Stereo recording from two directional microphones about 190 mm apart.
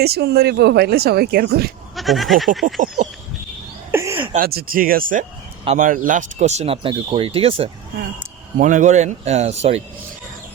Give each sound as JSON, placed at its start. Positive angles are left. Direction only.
{"t": 0.0, "sound": "speech", "side_deg": -55}
{"t": 2.0, "sound": "speech", "side_deg": 0}
{"t": 2.6, "sound": "a sound", "side_deg": 0}
{"t": 3.9, "sound": "a sound", "side_deg": -15}
{"t": 4.4, "sound": "speech", "side_deg": -50}
{"t": 8.5, "sound": "speech", "side_deg": -40}